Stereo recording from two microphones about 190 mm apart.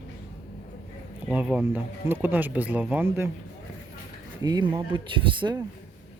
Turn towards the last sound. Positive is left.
turn(degrees=-25)  # may be behind; listen again after turning